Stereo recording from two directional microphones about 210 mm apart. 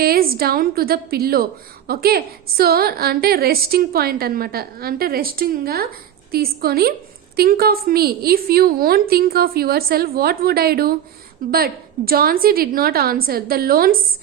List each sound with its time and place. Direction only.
0.0 s a woman's voice: 45° right (ahead or behind)